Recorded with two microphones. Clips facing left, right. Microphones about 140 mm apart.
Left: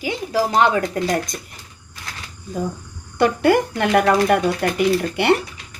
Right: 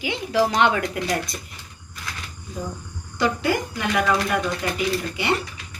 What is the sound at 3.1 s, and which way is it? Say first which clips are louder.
Speech: left 7 dB; 60° left (ahead or behind).